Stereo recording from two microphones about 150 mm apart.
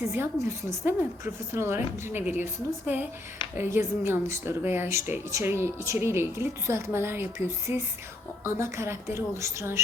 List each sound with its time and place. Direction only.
0.0 s a woman's voice: 15° right (ahead or behind)